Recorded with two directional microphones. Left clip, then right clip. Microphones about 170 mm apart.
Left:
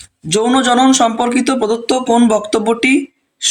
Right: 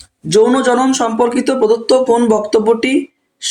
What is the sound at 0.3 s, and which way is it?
A man's voice, 30° left (ahead or behind).